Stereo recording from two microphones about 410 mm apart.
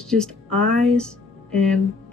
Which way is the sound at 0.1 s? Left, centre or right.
Centre.